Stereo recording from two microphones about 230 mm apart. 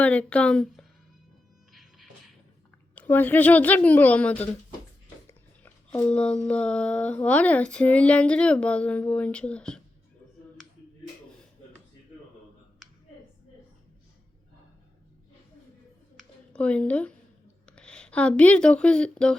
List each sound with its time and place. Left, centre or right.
0.0 s speech: centre
1.7 s music: centre
2.9 s a woman's voice: centre
5.6 s speech: centre
16.1 s a sound: centre
17.7 s speech: centre